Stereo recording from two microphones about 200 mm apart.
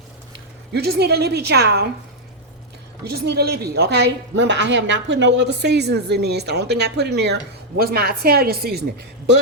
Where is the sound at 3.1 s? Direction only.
55° right (ahead or behind).